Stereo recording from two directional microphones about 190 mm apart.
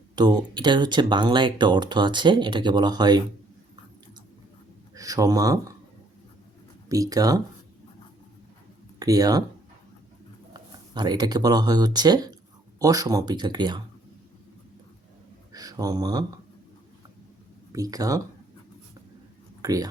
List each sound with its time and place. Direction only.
0.2 s speech: 20° right (ahead or behind)
4.9 s speech: 20° right (ahead or behind)
6.8 s speech: 15° right (ahead or behind)
9.0 s speech: 20° right (ahead or behind)
10.5 s speech: 20° right (ahead or behind)
15.5 s speech: 20° right (ahead or behind)
17.7 s speech: 20° right (ahead or behind)
19.6 s speech: 20° right (ahead or behind)